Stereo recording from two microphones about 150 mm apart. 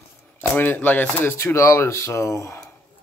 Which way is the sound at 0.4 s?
10° left (ahead or behind).